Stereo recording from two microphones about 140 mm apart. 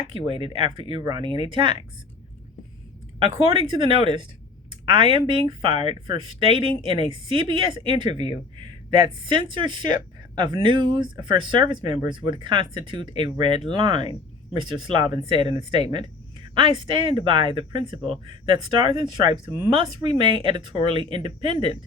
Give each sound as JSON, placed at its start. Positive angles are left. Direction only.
{"t": 0.1, "sound": "a woman's voice", "side_deg": -35}
{"t": 3.2, "sound": "a woman's voice", "side_deg": -35}
{"t": 15.9, "sound": "a sound", "side_deg": -35}
{"t": 16.7, "sound": "a woman's voice", "side_deg": -35}